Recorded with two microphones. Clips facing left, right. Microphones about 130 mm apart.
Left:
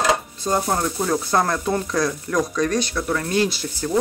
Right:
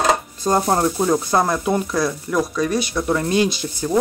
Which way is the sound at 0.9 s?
15° right (ahead or behind).